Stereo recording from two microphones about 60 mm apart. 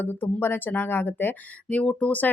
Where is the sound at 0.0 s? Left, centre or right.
Left.